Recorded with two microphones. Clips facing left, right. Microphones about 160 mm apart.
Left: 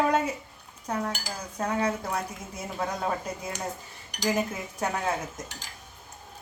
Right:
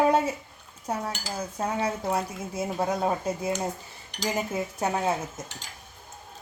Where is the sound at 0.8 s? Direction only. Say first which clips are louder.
Even; 30° right (ahead or behind).